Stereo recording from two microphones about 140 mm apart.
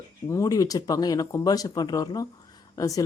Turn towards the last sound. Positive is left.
turn(degrees=25)  # may be behind; listen again after turning